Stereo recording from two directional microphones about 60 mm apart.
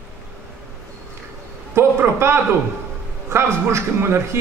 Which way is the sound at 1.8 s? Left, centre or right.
Right.